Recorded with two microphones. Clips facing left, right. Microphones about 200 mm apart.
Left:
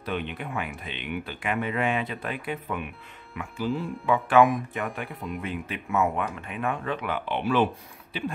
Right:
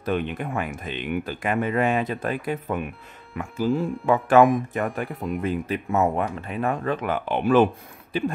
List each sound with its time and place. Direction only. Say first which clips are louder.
0.0 s speech: right 6 dB; 45° right (ahead or behind)